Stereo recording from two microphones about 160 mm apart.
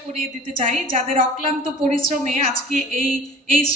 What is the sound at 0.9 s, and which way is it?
Speech, 50° right (ahead or behind).